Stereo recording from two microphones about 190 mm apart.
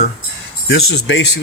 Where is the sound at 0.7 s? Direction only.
70° left (ahead or behind).